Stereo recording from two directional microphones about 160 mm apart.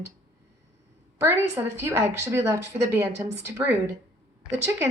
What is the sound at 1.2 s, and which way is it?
A woman's voice, 15° right (ahead or behind).